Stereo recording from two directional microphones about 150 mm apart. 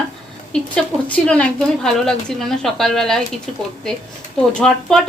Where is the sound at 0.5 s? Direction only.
5° left (ahead or behind).